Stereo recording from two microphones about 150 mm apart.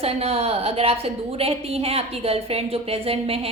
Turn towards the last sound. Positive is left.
turn(degrees=-40)  # may be behind; listen again after turning